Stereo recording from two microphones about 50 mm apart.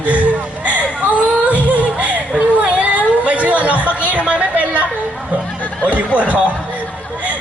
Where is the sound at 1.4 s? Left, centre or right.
Right.